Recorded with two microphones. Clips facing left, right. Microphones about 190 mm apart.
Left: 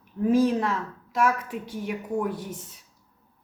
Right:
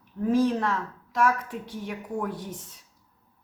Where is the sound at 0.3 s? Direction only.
5° left (ahead or behind).